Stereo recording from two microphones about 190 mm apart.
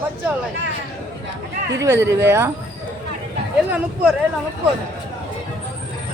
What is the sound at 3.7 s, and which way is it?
Speech, 10° right (ahead or behind).